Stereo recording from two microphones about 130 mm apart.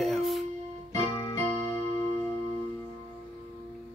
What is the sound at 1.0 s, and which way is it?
Keyboard, 45° left (ahead or behind).